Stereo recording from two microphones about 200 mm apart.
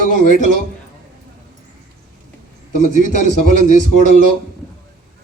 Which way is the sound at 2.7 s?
40° left (ahead or behind).